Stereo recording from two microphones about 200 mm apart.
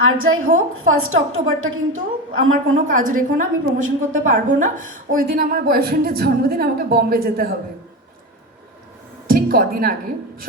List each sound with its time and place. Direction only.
0.0 s a woman's voice: 90° right
2.7 s a woman's voice: 40° right (ahead or behind)
9.2 s a sound: 50° right (ahead or behind)